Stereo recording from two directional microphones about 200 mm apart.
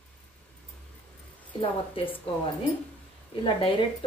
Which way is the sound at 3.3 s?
25° left (ahead or behind).